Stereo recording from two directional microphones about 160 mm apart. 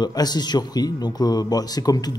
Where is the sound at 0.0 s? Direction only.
25° left (ahead or behind).